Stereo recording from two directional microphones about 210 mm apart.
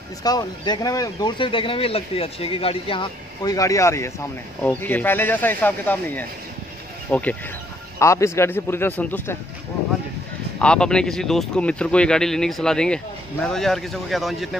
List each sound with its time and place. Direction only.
0.2 s speech: 20° left (ahead or behind)
10.6 s speech: 5° left (ahead or behind)